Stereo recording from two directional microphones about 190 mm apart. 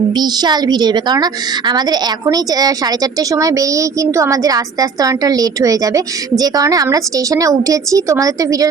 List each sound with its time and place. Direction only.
0.1 s a woman's voice: 20° right (ahead or behind)